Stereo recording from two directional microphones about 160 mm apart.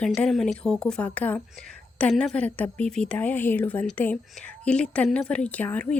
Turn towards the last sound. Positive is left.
turn(degrees=10)  # may be behind; listen again after turning